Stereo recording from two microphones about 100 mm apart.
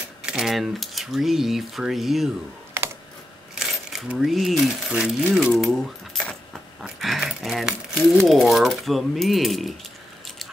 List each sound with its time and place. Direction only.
0.2 s coin: 5° right (ahead or behind)
2.8 s computer keyboard: 25° right (ahead or behind)
3.5 s speech: 5° right (ahead or behind)
4.9 s speech: 15° right (ahead or behind)
5.3 s speech: centre (ahead or behind)
6.8 s coin: 5° right (ahead or behind)